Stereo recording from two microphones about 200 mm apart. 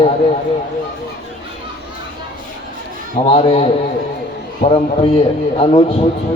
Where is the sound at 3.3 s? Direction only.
30° left (ahead or behind).